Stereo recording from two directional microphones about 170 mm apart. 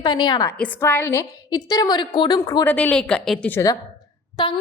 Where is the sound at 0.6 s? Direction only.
15° left (ahead or behind).